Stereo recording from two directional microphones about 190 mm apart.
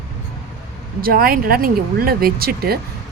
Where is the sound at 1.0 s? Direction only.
50° right (ahead or behind).